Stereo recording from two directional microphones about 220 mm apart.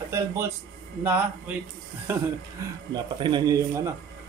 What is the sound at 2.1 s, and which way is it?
Speech, 10° right (ahead or behind).